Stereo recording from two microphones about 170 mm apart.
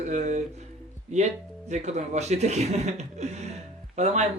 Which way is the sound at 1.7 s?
40° right (ahead or behind).